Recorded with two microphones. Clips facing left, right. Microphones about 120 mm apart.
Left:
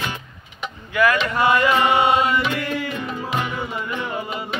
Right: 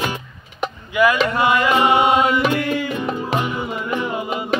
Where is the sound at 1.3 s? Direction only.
20° right (ahead or behind).